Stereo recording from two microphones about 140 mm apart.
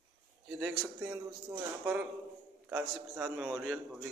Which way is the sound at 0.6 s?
15° right (ahead or behind).